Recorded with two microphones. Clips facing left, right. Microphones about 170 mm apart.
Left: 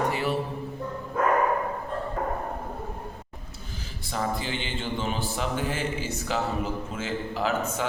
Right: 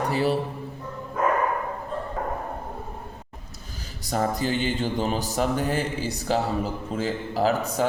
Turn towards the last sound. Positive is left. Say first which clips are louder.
# right 4 dB
turn(degrees=-35)  # may be behind; listen again after turning